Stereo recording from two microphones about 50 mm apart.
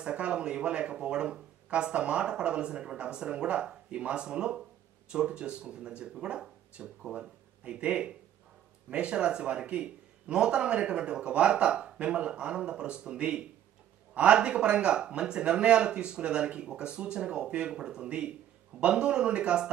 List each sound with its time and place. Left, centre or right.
0.0 s speech: right